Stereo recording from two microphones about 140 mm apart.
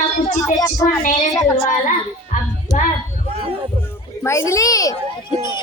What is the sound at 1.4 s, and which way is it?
Speech, 60° left (ahead or behind).